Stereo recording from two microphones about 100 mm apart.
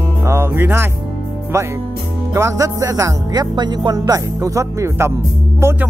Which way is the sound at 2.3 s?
30° right (ahead or behind).